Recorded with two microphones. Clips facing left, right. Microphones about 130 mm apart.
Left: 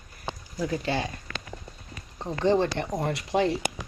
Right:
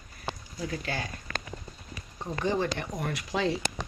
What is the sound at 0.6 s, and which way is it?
Speech, 30° left (ahead or behind).